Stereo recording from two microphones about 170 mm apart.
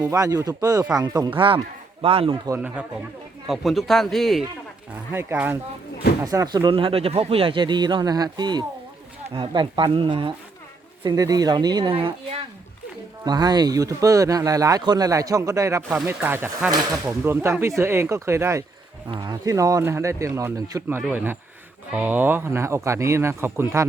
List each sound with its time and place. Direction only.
0.0 s a man's voice: 20° right (ahead or behind)
2.6 s speech: 10° right (ahead or behind)
4.9 s speech: 10° right (ahead or behind)